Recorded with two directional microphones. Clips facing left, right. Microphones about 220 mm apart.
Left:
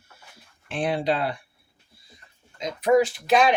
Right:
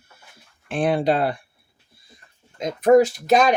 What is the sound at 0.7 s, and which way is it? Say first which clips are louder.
Speech: right 5 dB; 50° right (ahead or behind).